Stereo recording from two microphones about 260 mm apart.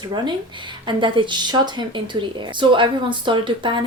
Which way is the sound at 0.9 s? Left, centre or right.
Centre.